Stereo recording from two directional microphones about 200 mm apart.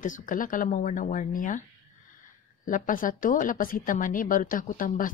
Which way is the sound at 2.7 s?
40° left (ahead or behind).